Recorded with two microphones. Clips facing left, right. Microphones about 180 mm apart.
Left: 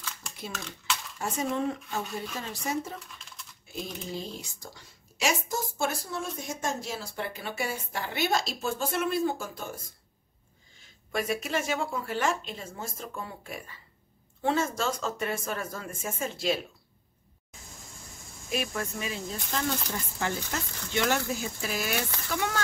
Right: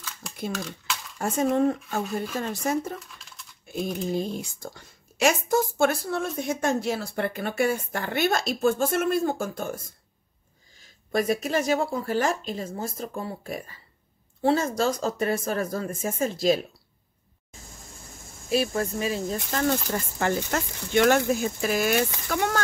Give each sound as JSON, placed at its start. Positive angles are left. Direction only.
{"t": 0.0, "sound": "typing", "side_deg": 0}
{"t": 0.5, "sound": "a sound", "side_deg": 0}
{"t": 1.1, "sound": "speech", "side_deg": -45}
{"t": 3.0, "sound": "typing", "side_deg": 0}
{"t": 3.7, "sound": "speech", "side_deg": -55}
{"t": 10.8, "sound": "speech", "side_deg": -40}
{"t": 18.5, "sound": "speech", "side_deg": -35}
{"t": 19.9, "sound": "speech", "side_deg": -55}